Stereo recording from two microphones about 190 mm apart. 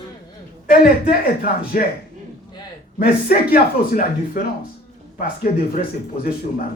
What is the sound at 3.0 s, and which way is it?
Speech, 50° left (ahead or behind).